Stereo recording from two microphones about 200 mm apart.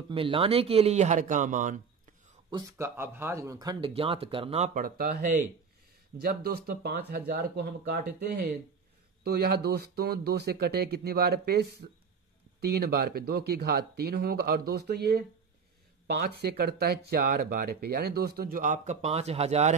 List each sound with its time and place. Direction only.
0.1 s speech: 25° right (ahead or behind)
2.5 s speech: 10° right (ahead or behind); by 5.2 s 45° right (ahead or behind)
6.2 s speech: 50° right (ahead or behind); by 19.7 s 30° right (ahead or behind)